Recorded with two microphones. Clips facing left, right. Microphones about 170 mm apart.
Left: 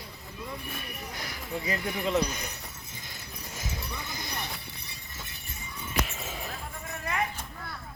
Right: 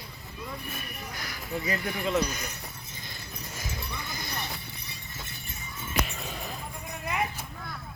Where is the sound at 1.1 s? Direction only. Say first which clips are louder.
Right 1 dB; 25° left (ahead or behind).